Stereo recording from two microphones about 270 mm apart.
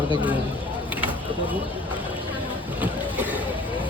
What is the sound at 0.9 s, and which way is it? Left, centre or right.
Vehicle, centre.